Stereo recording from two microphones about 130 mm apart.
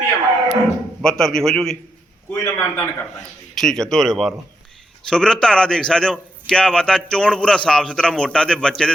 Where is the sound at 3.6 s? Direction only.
5° left (ahead or behind).